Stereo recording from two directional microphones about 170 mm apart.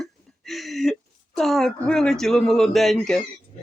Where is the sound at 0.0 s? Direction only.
Centre (ahead or behind).